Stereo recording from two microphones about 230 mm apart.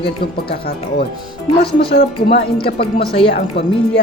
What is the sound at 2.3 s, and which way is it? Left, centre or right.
Speech, left.